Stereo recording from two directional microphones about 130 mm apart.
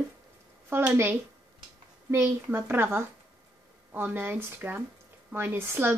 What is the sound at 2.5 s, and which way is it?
Speech, 15° right (ahead or behind).